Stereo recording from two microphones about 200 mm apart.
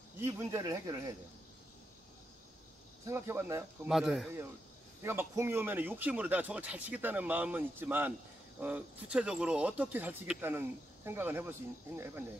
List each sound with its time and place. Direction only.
0.2 s speech: 15° right (ahead or behind)
3.1 s speech: 10° right (ahead or behind)
3.9 s speech: centre (ahead or behind)
5.0 s speech: 15° right (ahead or behind)